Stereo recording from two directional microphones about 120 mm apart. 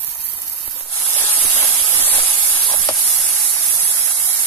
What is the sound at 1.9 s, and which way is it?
Hiss, 15° left (ahead or behind).